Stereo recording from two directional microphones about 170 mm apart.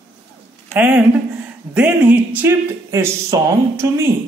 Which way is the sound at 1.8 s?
10° right (ahead or behind).